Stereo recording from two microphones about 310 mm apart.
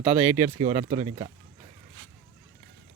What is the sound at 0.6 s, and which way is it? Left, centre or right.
Speech, centre.